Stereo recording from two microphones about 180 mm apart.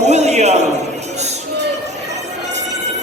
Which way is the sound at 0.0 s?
40° right (ahead or behind).